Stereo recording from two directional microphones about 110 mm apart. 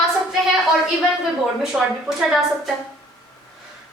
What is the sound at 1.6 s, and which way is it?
A woman's voice, 5° right (ahead or behind).